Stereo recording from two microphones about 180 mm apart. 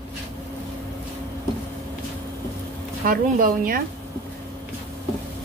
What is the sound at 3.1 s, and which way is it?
Speech, 50° right (ahead or behind).